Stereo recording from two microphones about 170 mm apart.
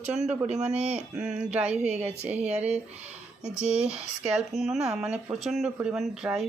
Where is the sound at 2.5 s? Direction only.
40° right (ahead or behind).